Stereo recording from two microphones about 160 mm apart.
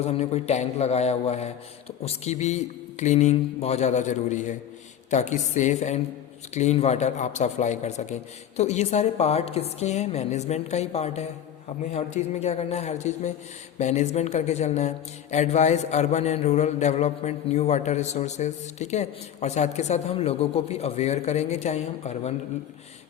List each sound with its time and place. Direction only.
0.0 s a man's voice: 40° left (ahead or behind)